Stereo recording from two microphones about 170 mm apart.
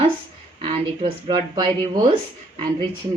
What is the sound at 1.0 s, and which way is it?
Speech, 25° right (ahead or behind).